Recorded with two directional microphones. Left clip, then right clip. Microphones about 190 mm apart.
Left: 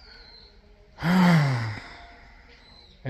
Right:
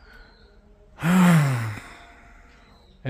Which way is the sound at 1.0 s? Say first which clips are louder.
Right 1 dB; 25° right (ahead or behind).